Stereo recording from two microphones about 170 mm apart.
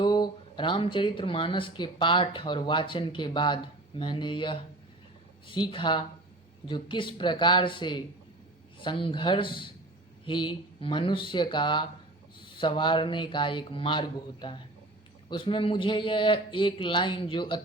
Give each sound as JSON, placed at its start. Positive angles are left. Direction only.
{"t": 0.0, "sound": "speech", "side_deg": 25}